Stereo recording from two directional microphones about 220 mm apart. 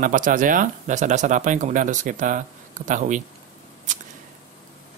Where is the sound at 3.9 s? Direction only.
35° right (ahead or behind).